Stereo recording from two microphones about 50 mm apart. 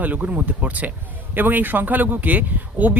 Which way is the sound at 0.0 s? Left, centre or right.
Right.